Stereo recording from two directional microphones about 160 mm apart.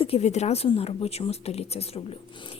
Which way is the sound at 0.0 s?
40° left (ahead or behind).